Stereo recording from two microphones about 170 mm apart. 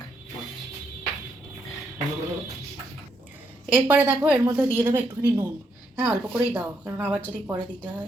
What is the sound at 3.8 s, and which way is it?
Speech, 10° right (ahead or behind).